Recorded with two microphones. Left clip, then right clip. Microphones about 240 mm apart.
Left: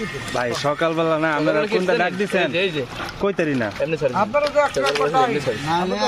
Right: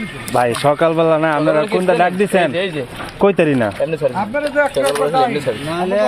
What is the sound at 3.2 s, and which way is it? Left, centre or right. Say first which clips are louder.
Speech: right 8 dB; right.